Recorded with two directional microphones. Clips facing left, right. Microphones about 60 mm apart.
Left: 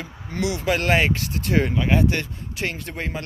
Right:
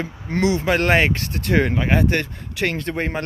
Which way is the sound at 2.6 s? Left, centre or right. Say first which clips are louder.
Right 6 dB; right.